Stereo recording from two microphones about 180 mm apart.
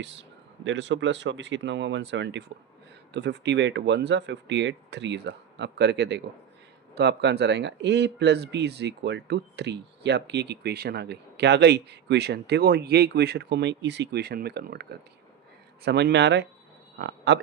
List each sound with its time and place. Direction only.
0.0 s speech: 80° right